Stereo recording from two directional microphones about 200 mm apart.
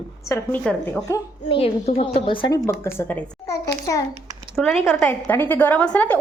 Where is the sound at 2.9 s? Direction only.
10° left (ahead or behind).